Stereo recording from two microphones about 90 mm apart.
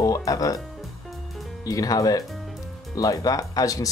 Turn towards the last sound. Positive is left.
turn(degrees=40)  # may be behind; listen again after turning